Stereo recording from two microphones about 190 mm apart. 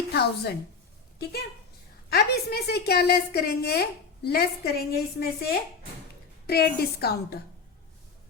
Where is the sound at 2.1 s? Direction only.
55° left (ahead or behind).